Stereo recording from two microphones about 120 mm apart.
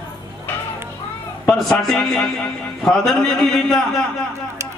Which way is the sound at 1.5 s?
Centre (ahead or behind).